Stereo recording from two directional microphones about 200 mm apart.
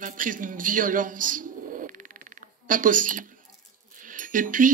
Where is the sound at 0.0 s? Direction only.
40° right (ahead or behind).